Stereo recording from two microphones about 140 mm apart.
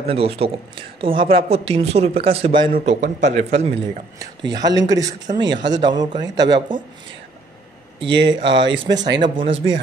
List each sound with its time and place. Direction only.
0.1 s speech: 45° right (ahead or behind)
2.8 s a man's voice: 55° right (ahead or behind)
4.2 s speech: 30° right (ahead or behind)
8.0 s speech: 35° right (ahead or behind)